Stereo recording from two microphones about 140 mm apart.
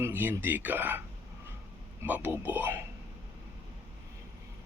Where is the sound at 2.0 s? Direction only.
15° right (ahead or behind).